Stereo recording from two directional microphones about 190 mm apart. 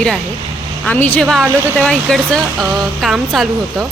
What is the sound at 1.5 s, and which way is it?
Speech, 15° right (ahead or behind).